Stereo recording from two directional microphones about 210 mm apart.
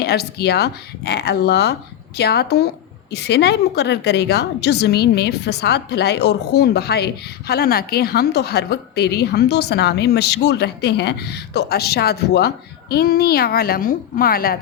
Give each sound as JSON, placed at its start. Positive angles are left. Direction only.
{"t": 0.0, "sound": "a woman's voice", "side_deg": 50}